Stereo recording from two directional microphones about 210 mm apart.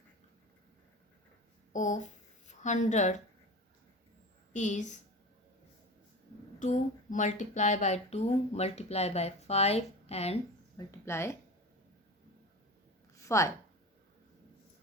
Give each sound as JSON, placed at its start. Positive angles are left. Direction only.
{"t": 1.7, "sound": "a woman's voice", "side_deg": 35}
{"t": 4.5, "sound": "speech", "side_deg": 35}
{"t": 6.6, "sound": "speech", "side_deg": 35}
{"t": 10.8, "sound": "speech", "side_deg": 10}
{"t": 13.1, "sound": "a sound", "side_deg": 15}